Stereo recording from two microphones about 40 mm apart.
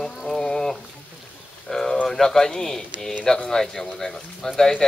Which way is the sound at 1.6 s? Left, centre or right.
Centre.